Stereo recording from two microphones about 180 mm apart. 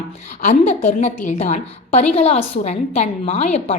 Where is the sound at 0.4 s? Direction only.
40° left (ahead or behind).